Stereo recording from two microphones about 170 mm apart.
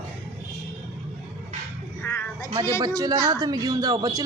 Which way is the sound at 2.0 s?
15° left (ahead or behind).